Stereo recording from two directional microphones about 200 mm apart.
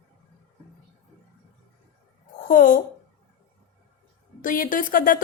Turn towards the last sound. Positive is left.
turn(degrees=45)  # may be behind; listen again after turning